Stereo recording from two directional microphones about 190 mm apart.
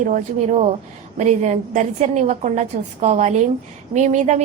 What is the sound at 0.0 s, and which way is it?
A woman's voice, 40° right (ahead or behind).